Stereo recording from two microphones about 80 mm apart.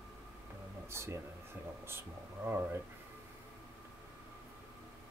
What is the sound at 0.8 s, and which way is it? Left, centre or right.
Speech, right.